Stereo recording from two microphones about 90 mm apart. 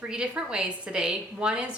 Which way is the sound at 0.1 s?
10° right (ahead or behind).